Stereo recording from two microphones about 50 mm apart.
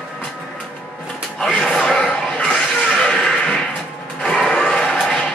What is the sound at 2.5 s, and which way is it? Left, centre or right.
Music, left.